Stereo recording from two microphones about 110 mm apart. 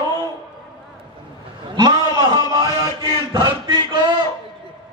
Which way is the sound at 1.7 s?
35° right (ahead or behind).